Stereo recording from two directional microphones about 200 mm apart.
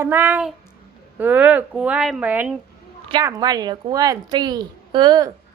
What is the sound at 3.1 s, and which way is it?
A woman's voice, 20° right (ahead or behind).